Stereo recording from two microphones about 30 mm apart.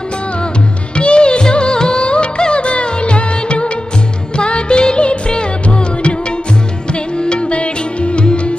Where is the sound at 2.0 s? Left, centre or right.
Left.